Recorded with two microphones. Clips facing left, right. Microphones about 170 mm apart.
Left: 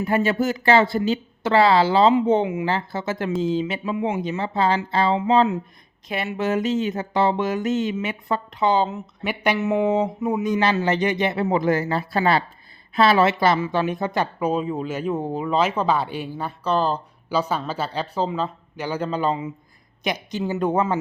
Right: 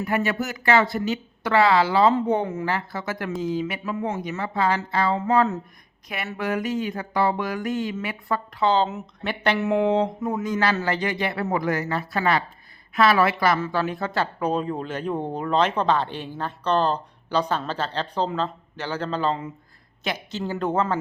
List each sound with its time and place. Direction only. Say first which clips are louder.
0.0 s speech: left 4 dB; 25° left (ahead or behind)
3.9 s speech: left 4 dB; 15° left (ahead or behind)
4.2 s speech: left 3 dB; 25° left (ahead or behind)
6.3 s speech: left 3 dB; 25° left (ahead or behind)
9.6 s speech: even; centre (ahead or behind)